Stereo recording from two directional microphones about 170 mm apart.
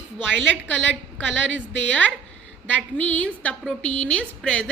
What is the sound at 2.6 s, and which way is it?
A woman's voice, 10° left (ahead or behind).